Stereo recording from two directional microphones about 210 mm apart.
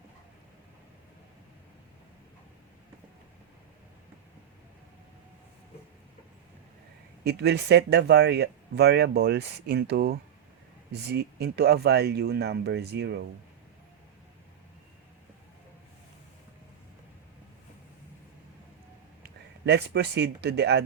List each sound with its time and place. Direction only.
7.3 s speech: 55° right (ahead or behind)
19.2 s speech: 55° right (ahead or behind)